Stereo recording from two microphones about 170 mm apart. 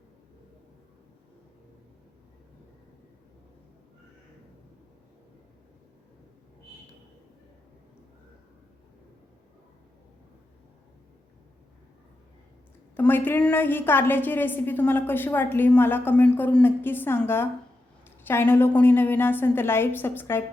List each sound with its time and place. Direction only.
13.0 s a woman's voice: 10° left (ahead or behind)